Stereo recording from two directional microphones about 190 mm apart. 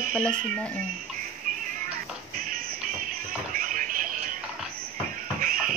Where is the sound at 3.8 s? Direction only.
45° right (ahead or behind).